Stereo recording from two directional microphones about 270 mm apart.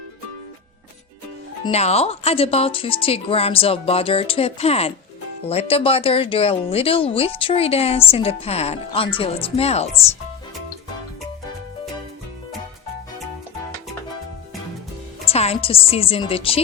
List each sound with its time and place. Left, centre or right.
1.6 s speech: left
15.3 s speech: left